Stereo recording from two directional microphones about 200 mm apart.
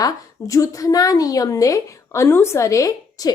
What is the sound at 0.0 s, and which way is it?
A woman's voice, 15° left (ahead or behind).